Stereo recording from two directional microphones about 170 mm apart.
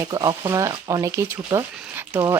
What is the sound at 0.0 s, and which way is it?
A woman's voice, 25° right (ahead or behind).